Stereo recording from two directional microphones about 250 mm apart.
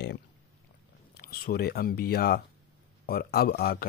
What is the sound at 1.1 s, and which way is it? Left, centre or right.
Speech, left.